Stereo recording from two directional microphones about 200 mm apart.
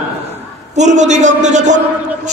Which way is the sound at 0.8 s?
35° right (ahead or behind).